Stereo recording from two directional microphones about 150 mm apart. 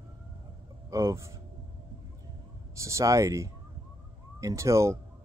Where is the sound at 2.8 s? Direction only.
20° right (ahead or behind).